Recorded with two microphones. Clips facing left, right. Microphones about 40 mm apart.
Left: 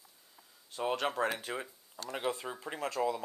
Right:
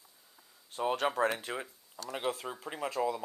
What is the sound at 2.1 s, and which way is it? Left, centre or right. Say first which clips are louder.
Speech: even; centre.